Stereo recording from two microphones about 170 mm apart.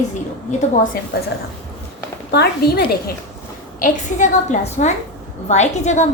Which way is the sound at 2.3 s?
70° left (ahead or behind).